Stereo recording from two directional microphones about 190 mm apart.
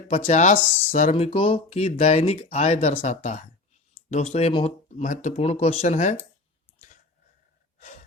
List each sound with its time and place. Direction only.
0.1 s speech: 35° left (ahead or behind)